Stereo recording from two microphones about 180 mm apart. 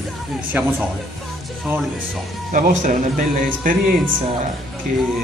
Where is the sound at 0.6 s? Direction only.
10° right (ahead or behind).